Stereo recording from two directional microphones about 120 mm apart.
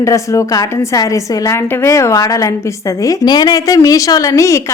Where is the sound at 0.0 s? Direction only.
25° left (ahead or behind).